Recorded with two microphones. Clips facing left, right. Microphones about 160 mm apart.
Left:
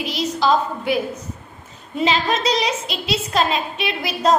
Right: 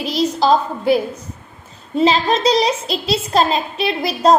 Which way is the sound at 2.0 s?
35° right (ahead or behind).